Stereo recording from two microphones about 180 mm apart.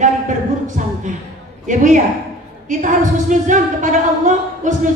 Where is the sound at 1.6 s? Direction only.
45° right (ahead or behind).